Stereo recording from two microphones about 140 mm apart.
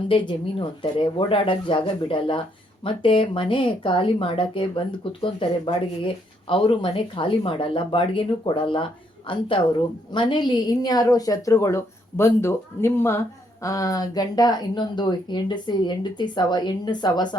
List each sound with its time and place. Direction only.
0.1 s a woman's voice: 35° left (ahead or behind)